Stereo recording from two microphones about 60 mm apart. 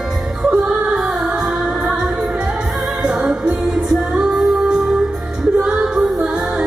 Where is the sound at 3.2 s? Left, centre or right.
Centre.